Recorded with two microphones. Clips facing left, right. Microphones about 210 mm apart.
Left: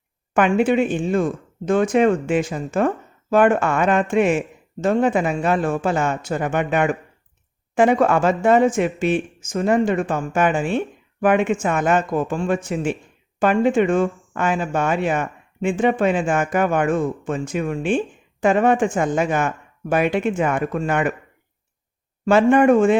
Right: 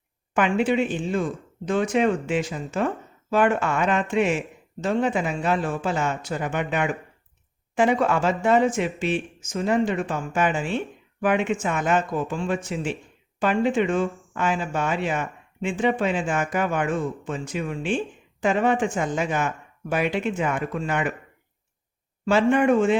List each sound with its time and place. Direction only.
0.3 s speech: 50° left (ahead or behind)
22.3 s speech: 50° left (ahead or behind)